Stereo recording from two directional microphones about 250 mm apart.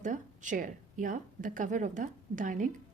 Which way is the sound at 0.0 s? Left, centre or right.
Right.